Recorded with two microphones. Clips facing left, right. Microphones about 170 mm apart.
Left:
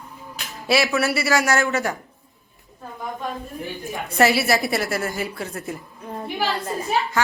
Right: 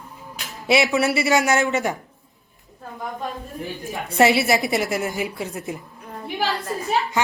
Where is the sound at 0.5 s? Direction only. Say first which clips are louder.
Right 1 dB; 20° right (ahead or behind).